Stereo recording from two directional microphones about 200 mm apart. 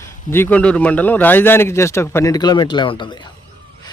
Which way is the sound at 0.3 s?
10° left (ahead or behind).